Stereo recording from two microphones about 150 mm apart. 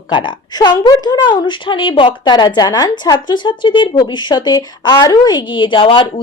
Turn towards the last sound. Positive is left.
turn(degrees=35)  # may be behind; listen again after turning